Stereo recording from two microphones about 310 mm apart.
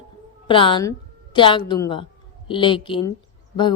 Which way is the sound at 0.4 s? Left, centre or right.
Centre.